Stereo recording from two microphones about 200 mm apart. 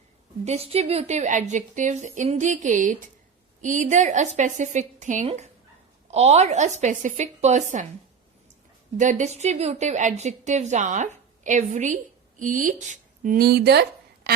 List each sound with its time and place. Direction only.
0.4 s a woman's voice: 30° right (ahead or behind)
9.0 s a woman's voice: 40° right (ahead or behind); by 13.8 s 55° right (ahead or behind)